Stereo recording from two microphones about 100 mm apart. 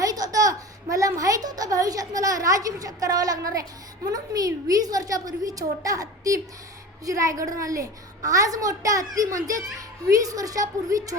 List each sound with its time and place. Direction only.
0.0 s a child's voice: 40° right (ahead or behind)